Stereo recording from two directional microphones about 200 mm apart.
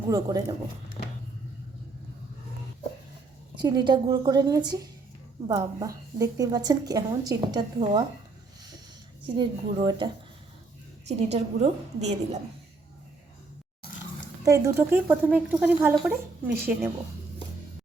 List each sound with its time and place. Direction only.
0.1 s a woman's voice: 20° right (ahead or behind)
3.6 s a woman's voice: 20° right (ahead or behind)
9.2 s a woman's voice: 25° right (ahead or behind)
11.2 s a woman's voice: 30° right (ahead or behind)
14.4 s speech: 15° right (ahead or behind)